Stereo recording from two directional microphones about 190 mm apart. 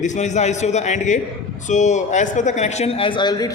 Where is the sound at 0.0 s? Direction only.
40° left (ahead or behind).